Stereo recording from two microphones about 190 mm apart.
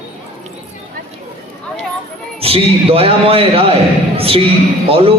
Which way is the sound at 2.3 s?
30° right (ahead or behind).